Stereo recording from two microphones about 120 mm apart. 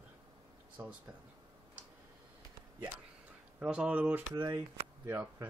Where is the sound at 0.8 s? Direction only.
25° right (ahead or behind).